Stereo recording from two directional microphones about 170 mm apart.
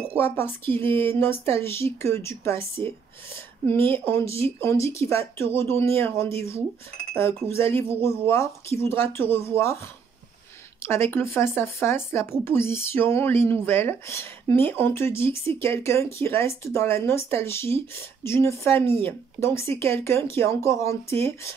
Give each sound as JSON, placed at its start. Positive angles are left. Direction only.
{"t": 0.1, "sound": "speech", "side_deg": 15}
{"t": 10.8, "sound": "speech", "side_deg": 15}